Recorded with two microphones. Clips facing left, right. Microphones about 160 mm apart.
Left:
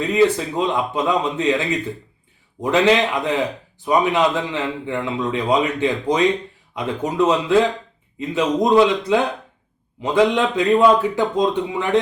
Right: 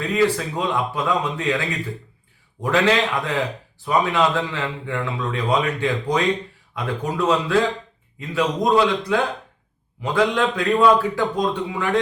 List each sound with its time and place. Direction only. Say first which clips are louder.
0.1 s a man's voice: left 3 dB; 20° left (ahead or behind)